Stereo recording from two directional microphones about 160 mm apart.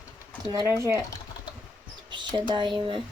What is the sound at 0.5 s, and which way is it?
Speech, 15° right (ahead or behind).